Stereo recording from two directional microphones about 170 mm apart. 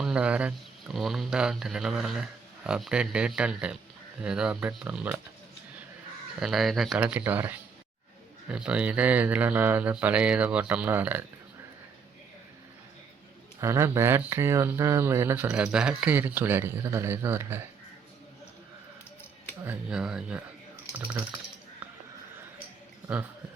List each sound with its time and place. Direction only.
0.0 s speech: 5° right (ahead or behind)
6.4 s speech: centre (ahead or behind)
13.6 s speech: 15° right (ahead or behind)
19.6 s speech: 5° right (ahead or behind)
21.8 s a sound: 10° right (ahead or behind)